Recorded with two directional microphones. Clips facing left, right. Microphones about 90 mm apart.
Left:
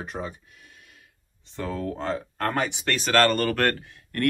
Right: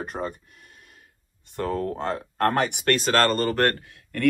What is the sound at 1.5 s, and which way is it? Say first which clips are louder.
Speech: right 3 dB; 55° right (ahead or behind).